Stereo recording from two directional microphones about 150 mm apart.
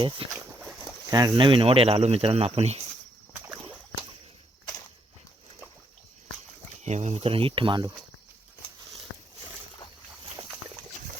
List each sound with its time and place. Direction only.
0.0 s speech: 35° right (ahead or behind)
1.1 s speech: 25° right (ahead or behind); by 2.8 s 45° right (ahead or behind)
6.8 s speech: 50° right (ahead or behind); by 7.9 s 30° right (ahead or behind)